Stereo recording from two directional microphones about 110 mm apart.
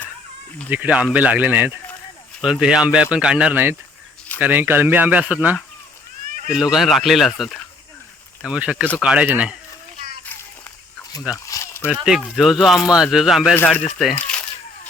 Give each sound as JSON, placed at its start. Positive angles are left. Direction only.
{"t": 0.7, "sound": "speech", "side_deg": -15}
{"t": 6.5, "sound": "speech", "side_deg": -5}
{"t": 11.4, "sound": "a sound", "side_deg": 30}
{"t": 12.0, "sound": "speech", "side_deg": -5}